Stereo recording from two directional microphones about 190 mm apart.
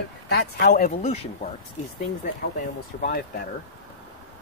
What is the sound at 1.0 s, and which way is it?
Speech, 30° left (ahead or behind).